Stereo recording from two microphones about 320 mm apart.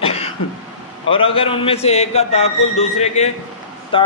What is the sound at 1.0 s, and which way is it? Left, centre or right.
A man's voice, centre.